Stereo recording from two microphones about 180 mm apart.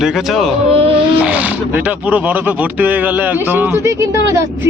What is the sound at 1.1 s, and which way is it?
Speech, 10° right (ahead or behind).